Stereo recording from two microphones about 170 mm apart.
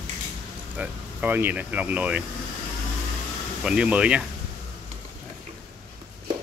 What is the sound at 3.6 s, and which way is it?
Speech, 5° right (ahead or behind).